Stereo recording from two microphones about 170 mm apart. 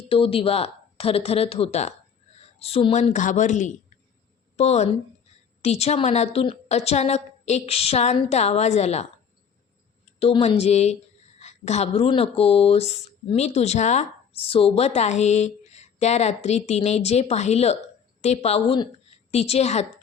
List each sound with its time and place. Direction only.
0.1 s speech: 30° left (ahead or behind)
10.2 s speech: 35° left (ahead or behind)